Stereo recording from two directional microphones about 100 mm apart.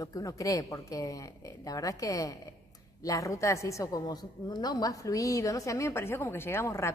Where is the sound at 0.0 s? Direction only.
35° left (ahead or behind).